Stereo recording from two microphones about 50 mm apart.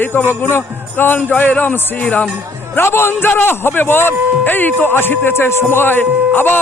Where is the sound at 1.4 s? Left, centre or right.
Left.